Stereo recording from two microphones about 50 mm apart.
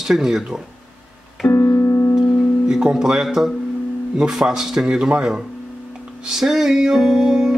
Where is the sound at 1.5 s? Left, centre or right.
Left.